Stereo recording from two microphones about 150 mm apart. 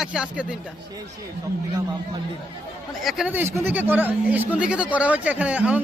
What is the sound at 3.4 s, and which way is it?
Speech, 15° right (ahead or behind).